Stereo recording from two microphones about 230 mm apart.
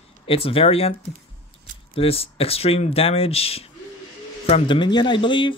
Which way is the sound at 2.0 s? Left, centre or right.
Left.